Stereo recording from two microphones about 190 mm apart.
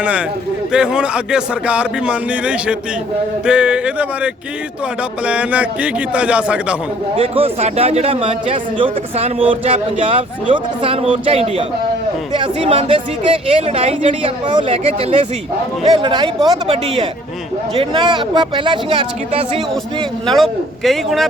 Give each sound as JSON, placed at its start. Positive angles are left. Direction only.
{"t": 0.0, "sound": "a man's voice", "side_deg": -5}
{"t": 7.2, "sound": "a man's voice", "side_deg": -30}
{"t": 20.2, "sound": "speech", "side_deg": 0}